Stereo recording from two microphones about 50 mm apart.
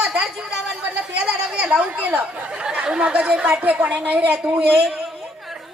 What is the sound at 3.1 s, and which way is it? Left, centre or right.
A woman's voice, right.